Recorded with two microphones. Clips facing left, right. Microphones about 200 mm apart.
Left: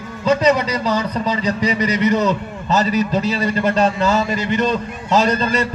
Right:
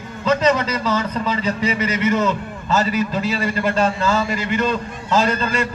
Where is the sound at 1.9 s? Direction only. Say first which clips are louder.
Left 2 dB; 35° left (ahead or behind).